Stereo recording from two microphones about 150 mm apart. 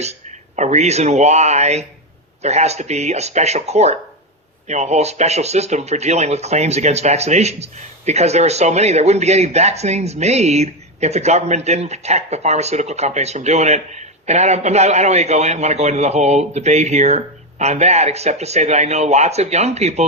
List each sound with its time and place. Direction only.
0.0 s speech: 50° right (ahead or behind)